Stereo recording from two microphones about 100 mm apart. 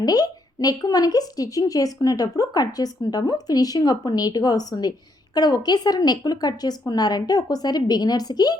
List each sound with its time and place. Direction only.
0.0 s a woman's voice: 40° left (ahead or behind)